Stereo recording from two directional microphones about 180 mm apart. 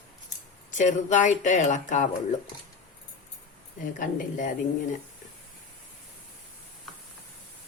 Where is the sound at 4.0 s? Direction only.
45° left (ahead or behind).